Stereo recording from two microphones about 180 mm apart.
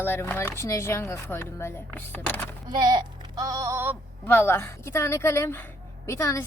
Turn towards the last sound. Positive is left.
turn(degrees=15)  # may be behind; listen again after turning